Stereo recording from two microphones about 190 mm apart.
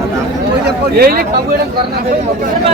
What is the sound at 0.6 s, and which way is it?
Speech, 55° right (ahead or behind).